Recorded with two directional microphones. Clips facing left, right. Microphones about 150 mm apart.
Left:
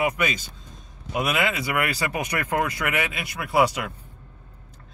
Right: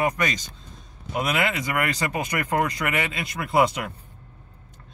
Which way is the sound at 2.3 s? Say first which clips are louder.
Right 1 dB; 15° right (ahead or behind).